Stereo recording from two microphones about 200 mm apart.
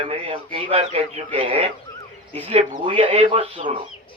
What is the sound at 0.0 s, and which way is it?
Speech, 25° right (ahead or behind).